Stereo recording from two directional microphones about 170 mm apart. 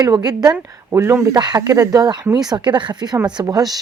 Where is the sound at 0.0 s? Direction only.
25° right (ahead or behind).